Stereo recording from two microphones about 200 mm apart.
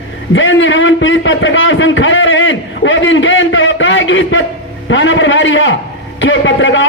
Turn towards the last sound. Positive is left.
turn(degrees=70)  # may be behind; listen again after turning